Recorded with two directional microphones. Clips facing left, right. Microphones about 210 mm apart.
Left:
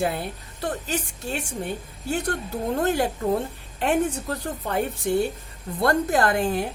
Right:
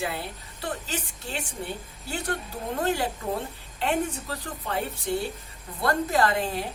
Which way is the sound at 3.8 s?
50° left (ahead or behind).